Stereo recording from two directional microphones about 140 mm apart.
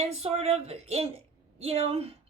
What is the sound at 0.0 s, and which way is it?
A woman's voice, 50° right (ahead or behind).